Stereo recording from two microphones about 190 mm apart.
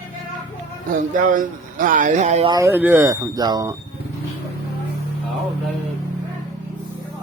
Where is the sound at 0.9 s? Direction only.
45° right (ahead or behind).